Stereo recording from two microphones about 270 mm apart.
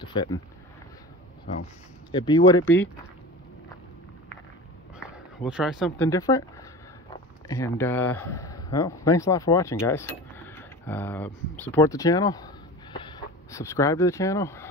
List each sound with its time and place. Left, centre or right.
0.0 s speech: centre
2.1 s speech: centre
5.0 s speech: centre
7.4 s speech: centre